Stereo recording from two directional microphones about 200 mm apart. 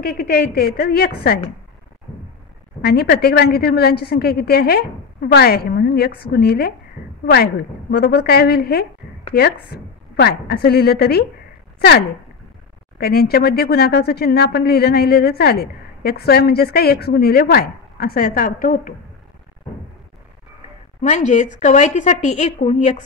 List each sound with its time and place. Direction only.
0.0 s a woman's voice: 50° left (ahead or behind)
2.8 s a woman's voice: 50° left (ahead or behind)
13.0 s a woman's voice: 50° left (ahead or behind)
21.0 s a woman's voice: 35° left (ahead or behind)